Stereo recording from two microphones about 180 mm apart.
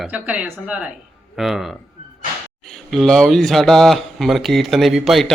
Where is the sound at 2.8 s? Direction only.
Centre (ahead or behind).